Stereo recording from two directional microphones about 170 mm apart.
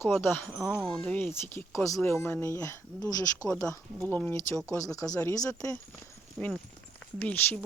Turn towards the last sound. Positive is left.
turn(degrees=10)  # may be behind; listen again after turning